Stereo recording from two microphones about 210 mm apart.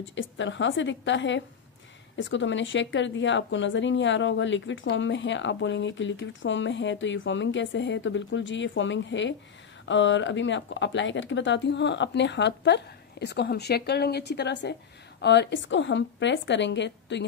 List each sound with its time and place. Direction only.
0.0 s speech: 60° left (ahead or behind)